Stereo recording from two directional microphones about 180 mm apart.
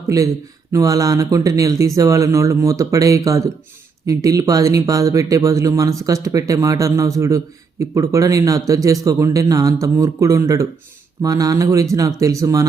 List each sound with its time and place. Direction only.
0.1 s speech: 20° right (ahead or behind)